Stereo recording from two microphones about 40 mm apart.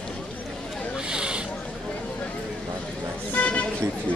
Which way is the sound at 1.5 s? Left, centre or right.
Left.